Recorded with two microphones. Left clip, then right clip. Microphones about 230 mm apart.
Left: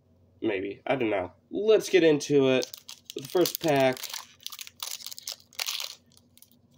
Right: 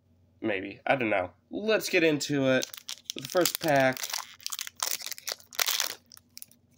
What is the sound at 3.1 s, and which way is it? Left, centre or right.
Speech, right.